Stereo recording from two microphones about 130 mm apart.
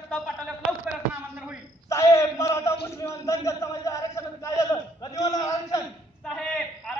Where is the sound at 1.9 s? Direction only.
25° left (ahead or behind).